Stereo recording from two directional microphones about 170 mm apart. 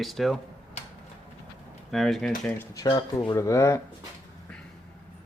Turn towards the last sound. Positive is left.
turn(degrees=20)  # may be behind; listen again after turning